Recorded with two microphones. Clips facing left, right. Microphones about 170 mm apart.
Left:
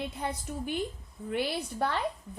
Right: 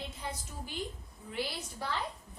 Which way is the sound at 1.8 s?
60° left (ahead or behind).